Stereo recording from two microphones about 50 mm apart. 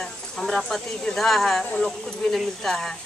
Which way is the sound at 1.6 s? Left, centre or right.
Left.